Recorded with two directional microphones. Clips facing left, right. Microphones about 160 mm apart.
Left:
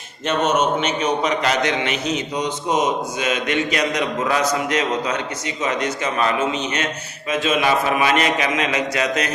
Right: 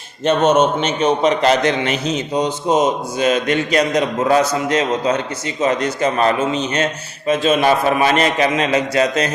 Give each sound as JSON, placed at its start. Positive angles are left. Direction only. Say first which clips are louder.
{"t": 0.3, "sound": "a man's voice", "louder": "right 5 dB", "side_deg": -30}